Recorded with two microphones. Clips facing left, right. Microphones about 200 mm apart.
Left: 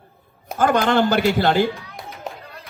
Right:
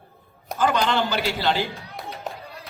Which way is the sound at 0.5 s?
50° left (ahead or behind).